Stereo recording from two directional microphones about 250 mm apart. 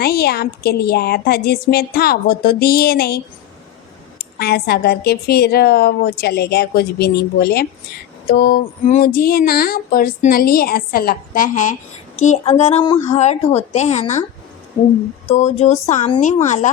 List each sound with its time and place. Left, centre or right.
0.0 s speech: left
4.2 s speech: left
15.3 s speech: left